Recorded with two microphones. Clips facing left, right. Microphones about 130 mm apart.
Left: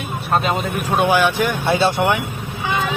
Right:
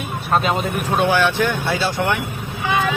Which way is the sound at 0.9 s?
15° left (ahead or behind).